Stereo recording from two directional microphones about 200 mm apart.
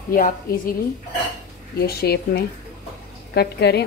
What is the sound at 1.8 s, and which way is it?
A woman's voice, 50° left (ahead or behind).